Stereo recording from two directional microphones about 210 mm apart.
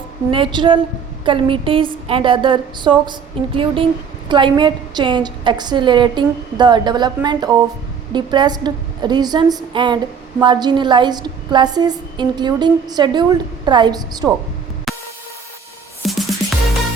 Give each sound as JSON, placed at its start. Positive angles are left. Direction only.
{"t": 0.3, "sound": "a woman's voice", "side_deg": -25}
{"t": 14.9, "sound": "music", "side_deg": 0}
{"t": 16.0, "sound": "music", "side_deg": 0}